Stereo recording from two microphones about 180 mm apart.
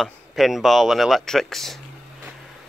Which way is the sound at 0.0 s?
Centre (ahead or behind).